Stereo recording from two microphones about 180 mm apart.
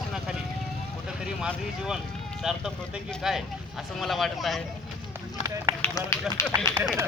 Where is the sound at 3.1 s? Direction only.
Centre (ahead or behind).